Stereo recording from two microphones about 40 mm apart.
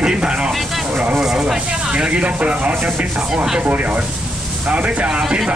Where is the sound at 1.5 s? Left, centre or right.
Right.